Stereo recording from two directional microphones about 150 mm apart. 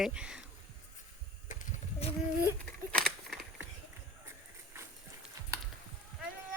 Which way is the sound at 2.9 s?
5° left (ahead or behind).